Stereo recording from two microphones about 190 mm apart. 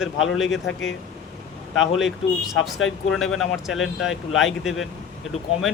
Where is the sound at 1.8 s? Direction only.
80° left.